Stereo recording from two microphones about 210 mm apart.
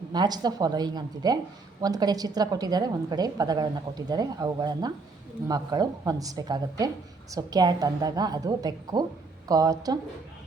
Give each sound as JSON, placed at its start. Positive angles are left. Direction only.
{"t": 0.1, "sound": "a woman's voice", "side_deg": -20}